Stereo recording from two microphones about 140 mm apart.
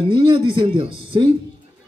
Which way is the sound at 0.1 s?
35° right (ahead or behind).